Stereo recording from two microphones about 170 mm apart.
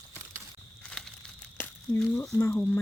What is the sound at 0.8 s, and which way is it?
Crumpling, 5° left (ahead or behind).